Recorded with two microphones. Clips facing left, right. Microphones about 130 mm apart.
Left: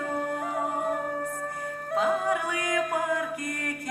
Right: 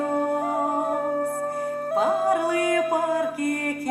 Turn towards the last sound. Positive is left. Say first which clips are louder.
# right 6 dB
turn(degrees=-30)  # may be behind; listen again after turning